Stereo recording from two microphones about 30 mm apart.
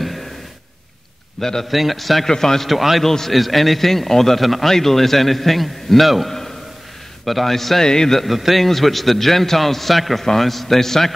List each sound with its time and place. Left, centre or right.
1.4 s a man's voice: centre
1.7 s a man's voice: centre
2.2 s a man's voice: centre
2.7 s a man's voice: centre
3.0 s a man's voice: centre
3.3 s a man's voice: centre
4.6 s a man's voice: centre
7.8 s a man's voice: left
8.3 s a man's voice: centre